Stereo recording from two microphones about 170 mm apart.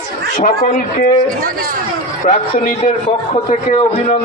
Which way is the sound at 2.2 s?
50° left (ahead or behind).